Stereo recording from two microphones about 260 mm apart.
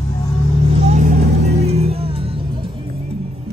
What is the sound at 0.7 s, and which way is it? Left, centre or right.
Vehicle, right.